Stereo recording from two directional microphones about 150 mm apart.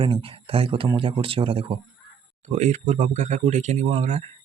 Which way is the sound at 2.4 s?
50° right (ahead or behind).